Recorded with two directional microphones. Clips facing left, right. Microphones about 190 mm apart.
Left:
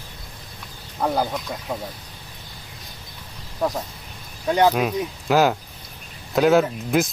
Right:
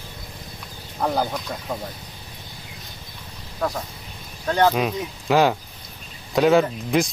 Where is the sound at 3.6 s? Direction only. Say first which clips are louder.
Left 2 dB; 15° left (ahead or behind).